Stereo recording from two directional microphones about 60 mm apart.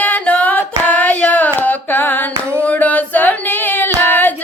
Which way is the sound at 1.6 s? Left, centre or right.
Left.